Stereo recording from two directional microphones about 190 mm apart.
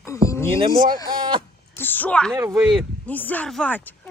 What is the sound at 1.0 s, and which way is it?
Speech, 25° right (ahead or behind).